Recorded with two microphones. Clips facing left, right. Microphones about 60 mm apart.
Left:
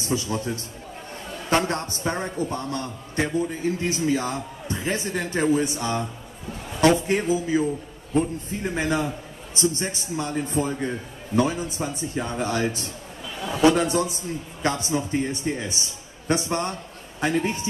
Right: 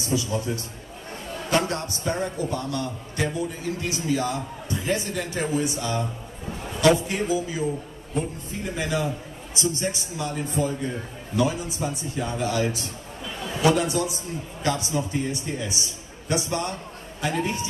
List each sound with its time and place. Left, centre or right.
0.0 s a man's voice: left
1.5 s a man's voice: left
7.1 s a man's voice: left